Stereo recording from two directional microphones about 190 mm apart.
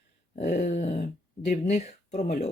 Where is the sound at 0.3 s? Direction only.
40° left (ahead or behind).